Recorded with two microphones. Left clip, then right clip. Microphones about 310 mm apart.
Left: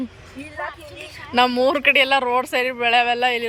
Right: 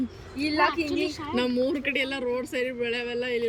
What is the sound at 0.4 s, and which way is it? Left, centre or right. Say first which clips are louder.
Speech: right 8 dB; right.